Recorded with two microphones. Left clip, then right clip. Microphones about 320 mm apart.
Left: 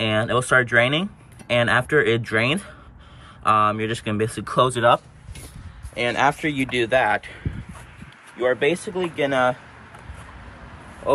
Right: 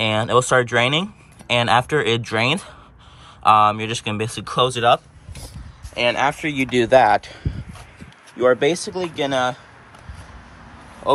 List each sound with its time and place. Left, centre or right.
0.0 s speech: centre
6.0 s speech: centre
8.4 s speech: right
8.8 s speech: centre